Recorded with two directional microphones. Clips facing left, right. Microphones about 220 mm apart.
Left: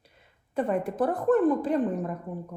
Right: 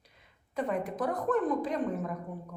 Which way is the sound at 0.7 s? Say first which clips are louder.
Left 5 dB; 30° left (ahead or behind).